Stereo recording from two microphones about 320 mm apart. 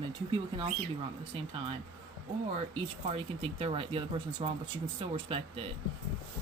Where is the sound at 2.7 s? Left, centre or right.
Centre.